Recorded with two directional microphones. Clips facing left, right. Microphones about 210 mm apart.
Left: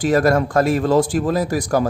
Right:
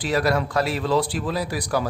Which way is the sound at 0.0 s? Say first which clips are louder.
Left 6 dB; 45° left (ahead or behind).